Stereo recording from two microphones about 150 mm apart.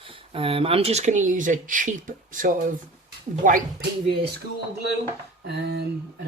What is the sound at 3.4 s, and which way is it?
Speech, 75° right (ahead or behind).